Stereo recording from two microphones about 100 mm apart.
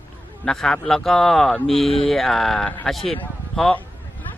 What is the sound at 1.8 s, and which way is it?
Speech, 80° left.